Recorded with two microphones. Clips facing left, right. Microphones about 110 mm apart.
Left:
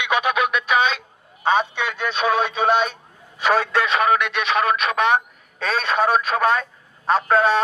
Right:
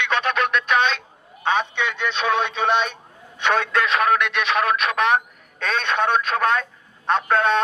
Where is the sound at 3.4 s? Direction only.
5° left (ahead or behind).